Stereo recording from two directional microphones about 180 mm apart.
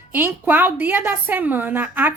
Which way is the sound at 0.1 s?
10° right (ahead or behind).